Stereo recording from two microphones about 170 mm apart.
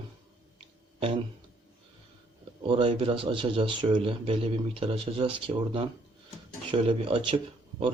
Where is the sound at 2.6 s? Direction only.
30° right (ahead or behind).